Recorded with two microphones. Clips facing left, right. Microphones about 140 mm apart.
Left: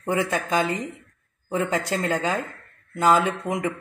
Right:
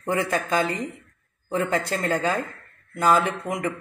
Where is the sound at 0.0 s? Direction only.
20° left (ahead or behind).